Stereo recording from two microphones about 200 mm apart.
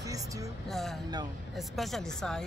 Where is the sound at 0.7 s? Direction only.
Centre (ahead or behind).